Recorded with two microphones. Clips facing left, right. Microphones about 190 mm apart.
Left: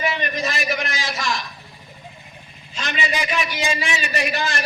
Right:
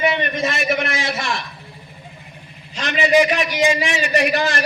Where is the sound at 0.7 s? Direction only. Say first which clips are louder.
Right 5 dB; 60° right (ahead or behind).